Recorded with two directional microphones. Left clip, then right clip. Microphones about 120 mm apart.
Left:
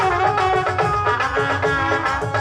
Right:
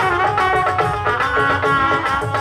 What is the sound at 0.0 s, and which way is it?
Music, 45° left (ahead or behind).